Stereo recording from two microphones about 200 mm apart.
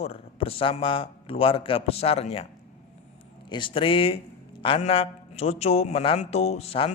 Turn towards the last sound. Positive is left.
turn(degrees=30)  # may be behind; listen again after turning